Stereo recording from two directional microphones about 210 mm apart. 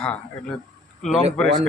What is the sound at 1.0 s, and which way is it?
Speech, centre (ahead or behind).